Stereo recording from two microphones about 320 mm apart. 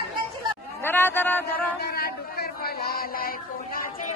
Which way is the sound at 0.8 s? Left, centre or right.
Centre.